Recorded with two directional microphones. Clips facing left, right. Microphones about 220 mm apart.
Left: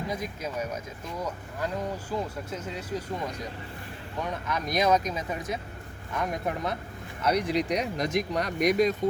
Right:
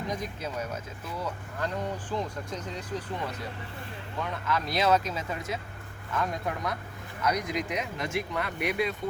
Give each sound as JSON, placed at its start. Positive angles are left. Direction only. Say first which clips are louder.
{"t": 0.1, "sound": "speech", "louder": "left 1 dB", "side_deg": 10}